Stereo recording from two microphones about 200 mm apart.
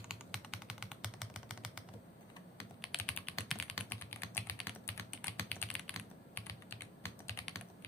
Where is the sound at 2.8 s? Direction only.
5° left (ahead or behind).